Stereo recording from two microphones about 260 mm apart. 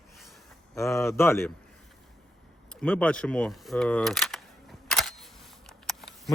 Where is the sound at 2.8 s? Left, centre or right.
Centre.